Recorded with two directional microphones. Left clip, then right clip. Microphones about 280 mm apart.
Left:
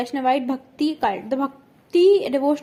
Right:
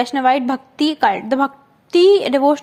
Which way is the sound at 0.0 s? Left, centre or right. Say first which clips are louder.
Right 6 dB; right.